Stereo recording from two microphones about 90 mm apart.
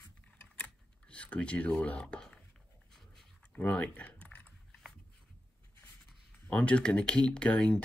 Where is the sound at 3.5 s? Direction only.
15° left (ahead or behind).